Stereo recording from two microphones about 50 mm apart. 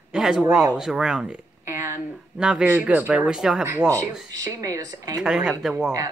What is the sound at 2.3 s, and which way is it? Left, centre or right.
Speech, centre.